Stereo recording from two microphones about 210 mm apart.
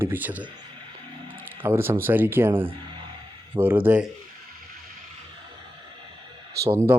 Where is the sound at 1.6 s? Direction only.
10° right (ahead or behind).